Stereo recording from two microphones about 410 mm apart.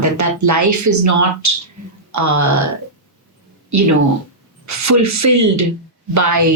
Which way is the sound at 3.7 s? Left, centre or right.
Right.